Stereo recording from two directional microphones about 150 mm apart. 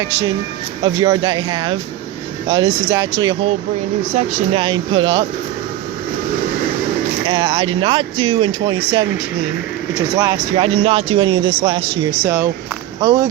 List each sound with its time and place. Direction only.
0.9 s speech: 30° right (ahead or behind)
4.1 s speech: 50° right (ahead or behind)
4.6 s speech: 35° right (ahead or behind)
7.3 s speech: 30° right (ahead or behind)
10.2 s speech: 25° right (ahead or behind)
10.8 s speech: 40° right (ahead or behind)